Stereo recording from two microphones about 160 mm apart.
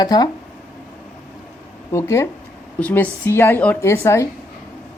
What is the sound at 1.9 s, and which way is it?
A woman's voice, 15° left (ahead or behind).